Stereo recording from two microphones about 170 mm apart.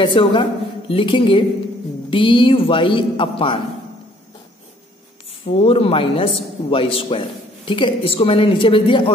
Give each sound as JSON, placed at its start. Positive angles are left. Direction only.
{"t": 0.0, "sound": "a man's voice", "side_deg": 30}
{"t": 5.4, "sound": "a man's voice", "side_deg": 35}